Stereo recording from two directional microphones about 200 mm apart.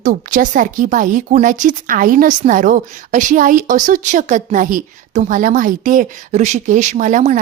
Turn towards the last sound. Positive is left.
turn(degrees=-40)  # may be behind; listen again after turning